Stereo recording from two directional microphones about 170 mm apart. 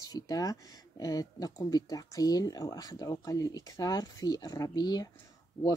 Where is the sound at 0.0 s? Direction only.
20° left (ahead or behind).